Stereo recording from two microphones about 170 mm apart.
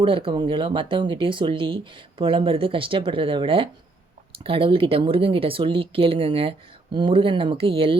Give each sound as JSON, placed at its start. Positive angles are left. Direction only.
{"t": 0.0, "sound": "speech", "side_deg": -30}